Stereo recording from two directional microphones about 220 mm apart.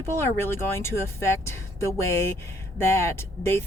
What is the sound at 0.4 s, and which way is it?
Speech, 10° left (ahead or behind).